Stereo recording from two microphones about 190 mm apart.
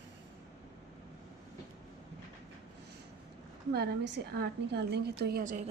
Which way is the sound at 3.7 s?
60° right (ahead or behind).